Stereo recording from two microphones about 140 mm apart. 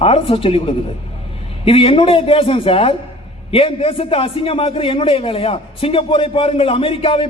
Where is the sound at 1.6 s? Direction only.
40° left (ahead or behind).